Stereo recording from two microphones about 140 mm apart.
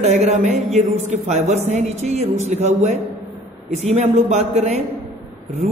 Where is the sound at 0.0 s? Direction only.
55° right (ahead or behind).